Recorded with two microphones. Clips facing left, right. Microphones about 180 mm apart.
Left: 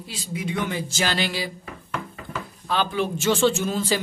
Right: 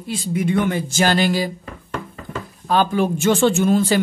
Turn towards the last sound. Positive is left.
turn(degrees=-55)  # may be behind; listen again after turning